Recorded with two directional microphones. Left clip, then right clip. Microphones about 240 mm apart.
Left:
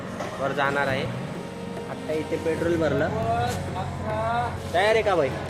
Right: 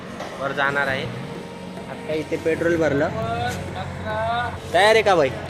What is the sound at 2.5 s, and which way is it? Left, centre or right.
Speech, right.